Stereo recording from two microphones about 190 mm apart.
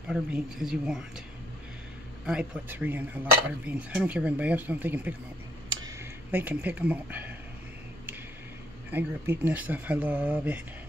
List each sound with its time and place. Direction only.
0.1 s speech: centre (ahead or behind)
2.2 s speech: 5° right (ahead or behind)
5.7 s a sound: 20° right (ahead or behind)
8.9 s speech: 10° right (ahead or behind)